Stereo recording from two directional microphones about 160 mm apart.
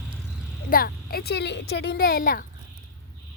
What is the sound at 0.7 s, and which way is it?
A woman's voice, 70° left (ahead or behind).